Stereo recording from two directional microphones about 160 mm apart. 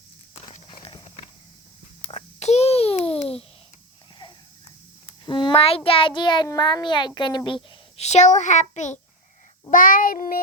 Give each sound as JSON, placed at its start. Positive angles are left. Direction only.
{"t": 0.7, "sound": "clip-clop", "side_deg": 30}
{"t": 2.0, "sound": "babbling", "side_deg": 40}
{"t": 5.0, "sound": "a child's voice", "side_deg": 30}
{"t": 9.6, "sound": "child singing", "side_deg": 60}